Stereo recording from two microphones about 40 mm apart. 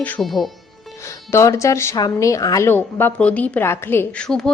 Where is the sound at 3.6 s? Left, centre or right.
Left.